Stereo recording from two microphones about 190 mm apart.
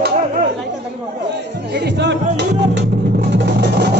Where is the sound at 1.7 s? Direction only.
60° right (ahead or behind).